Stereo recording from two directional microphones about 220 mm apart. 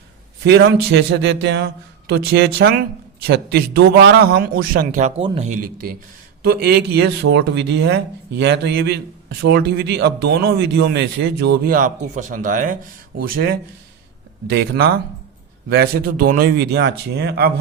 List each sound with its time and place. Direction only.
0.4 s speech: 50° right (ahead or behind)
4.9 s speech: 30° right (ahead or behind)
6.4 s speech: 45° right (ahead or behind)